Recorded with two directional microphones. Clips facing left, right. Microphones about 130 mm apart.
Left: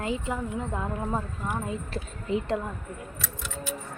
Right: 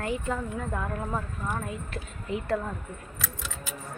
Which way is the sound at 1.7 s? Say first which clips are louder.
Left 3 dB; 30° left (ahead or behind).